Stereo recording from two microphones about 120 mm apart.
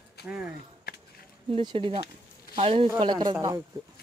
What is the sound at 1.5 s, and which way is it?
Speech, 45° right (ahead or behind).